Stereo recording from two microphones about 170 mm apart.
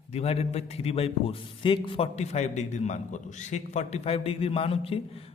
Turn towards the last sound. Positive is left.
turn(degrees=35)  # may be behind; listen again after turning